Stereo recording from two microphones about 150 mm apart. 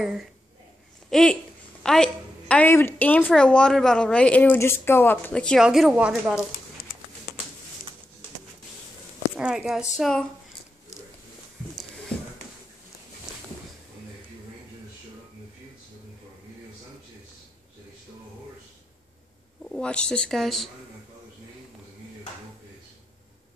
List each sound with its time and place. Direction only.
0.0 s a woman's voice: 5° right (ahead or behind)
9.4 s a woman's voice: 5° right (ahead or behind)
12.1 s a sound: 5° left (ahead or behind)
19.6 s speech: 5° left (ahead or behind)